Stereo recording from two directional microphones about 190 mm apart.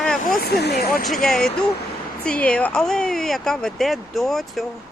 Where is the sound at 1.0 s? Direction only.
Centre (ahead or behind).